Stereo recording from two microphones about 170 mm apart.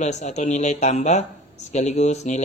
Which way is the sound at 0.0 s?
40° left (ahead or behind).